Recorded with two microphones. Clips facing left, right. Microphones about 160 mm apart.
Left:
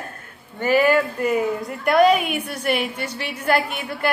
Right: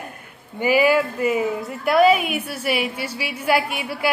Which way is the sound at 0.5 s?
10° right (ahead or behind).